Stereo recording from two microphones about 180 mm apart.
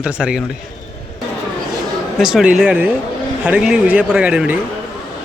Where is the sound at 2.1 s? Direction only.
5° right (ahead or behind).